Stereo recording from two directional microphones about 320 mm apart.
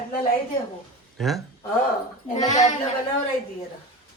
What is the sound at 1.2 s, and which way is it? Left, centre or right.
Speech, centre.